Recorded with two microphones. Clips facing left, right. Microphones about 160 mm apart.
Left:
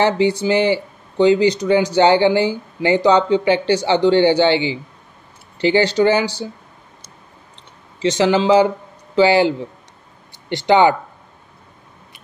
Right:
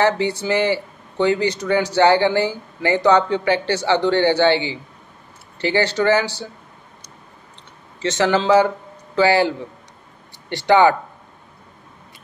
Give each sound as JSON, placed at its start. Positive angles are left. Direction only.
{"t": 0.0, "sound": "speech", "side_deg": 15}
{"t": 8.0, "sound": "speech", "side_deg": 15}
{"t": 10.5, "sound": "speech", "side_deg": 20}